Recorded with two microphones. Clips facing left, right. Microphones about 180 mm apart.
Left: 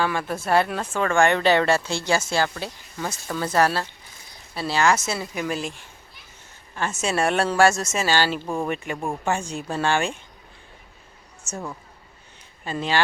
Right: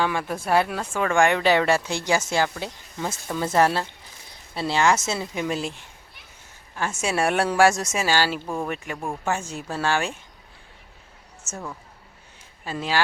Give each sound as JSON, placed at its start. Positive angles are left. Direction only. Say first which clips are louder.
{"t": 0.0, "sound": "a woman's voice", "louder": "even", "side_deg": -15}
{"t": 6.7, "sound": "a woman's voice", "louder": "left 1 dB", "side_deg": -10}
{"t": 8.4, "sound": "speech", "louder": "left 2 dB", "side_deg": 5}
{"t": 11.5, "sound": "speech", "louder": "left 3 dB", "side_deg": -5}
{"t": 12.6, "sound": "speech", "louder": "left 2 dB", "side_deg": -5}